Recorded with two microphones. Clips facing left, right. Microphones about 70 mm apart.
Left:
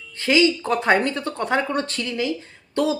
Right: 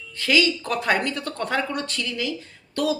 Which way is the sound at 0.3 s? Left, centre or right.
Left.